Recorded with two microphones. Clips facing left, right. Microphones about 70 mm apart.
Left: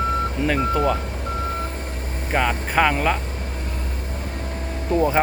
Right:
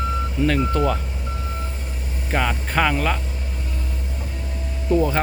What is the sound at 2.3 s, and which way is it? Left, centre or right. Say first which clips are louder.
Speech: left 1 dB; centre.